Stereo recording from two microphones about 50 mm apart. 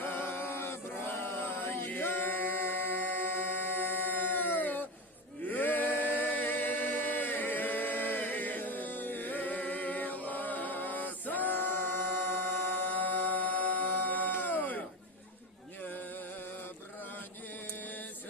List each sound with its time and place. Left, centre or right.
0.0 s chant: left
5.5 s a capella: left
12.2 s music: left
17.7 s a sound: left